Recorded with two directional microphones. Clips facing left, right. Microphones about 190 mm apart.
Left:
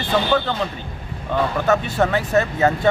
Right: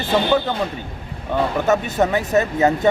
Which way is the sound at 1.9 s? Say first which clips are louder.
Right 1 dB; 20° right (ahead or behind).